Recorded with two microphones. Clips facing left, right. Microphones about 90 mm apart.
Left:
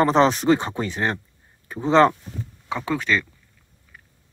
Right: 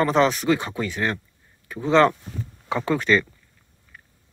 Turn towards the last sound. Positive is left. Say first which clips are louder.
# right 3 dB
turn(degrees=0)  # may be behind; listen again after turning